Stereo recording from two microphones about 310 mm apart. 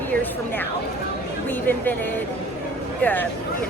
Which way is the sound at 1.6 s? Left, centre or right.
Centre.